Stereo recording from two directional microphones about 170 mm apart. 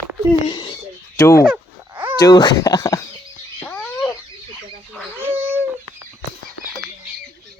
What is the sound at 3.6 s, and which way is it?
Cat, 5° left (ahead or behind).